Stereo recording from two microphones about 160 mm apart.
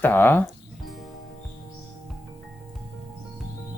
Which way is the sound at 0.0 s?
15° left (ahead or behind).